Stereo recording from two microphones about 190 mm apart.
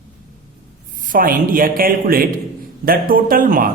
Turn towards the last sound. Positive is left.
turn(degrees=-45)  # may be behind; listen again after turning